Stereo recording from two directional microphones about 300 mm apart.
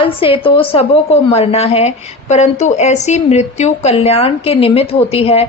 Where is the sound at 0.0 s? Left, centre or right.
Centre.